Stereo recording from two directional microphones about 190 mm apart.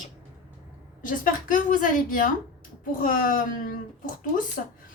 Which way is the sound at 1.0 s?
45° left (ahead or behind).